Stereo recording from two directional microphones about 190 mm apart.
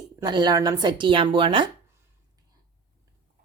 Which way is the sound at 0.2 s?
25° right (ahead or behind).